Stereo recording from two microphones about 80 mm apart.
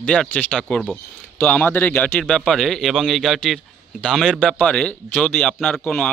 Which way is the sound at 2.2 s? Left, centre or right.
Centre.